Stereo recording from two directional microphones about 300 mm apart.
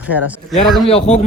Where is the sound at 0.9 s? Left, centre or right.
Left.